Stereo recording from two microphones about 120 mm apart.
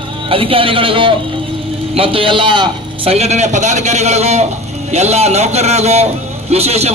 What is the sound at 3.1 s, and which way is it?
A man's voice, 65° right (ahead or behind).